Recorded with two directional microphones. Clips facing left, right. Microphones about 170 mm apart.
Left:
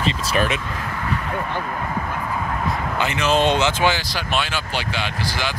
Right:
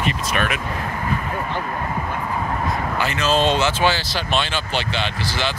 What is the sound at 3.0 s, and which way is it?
Speech, 20° left (ahead or behind).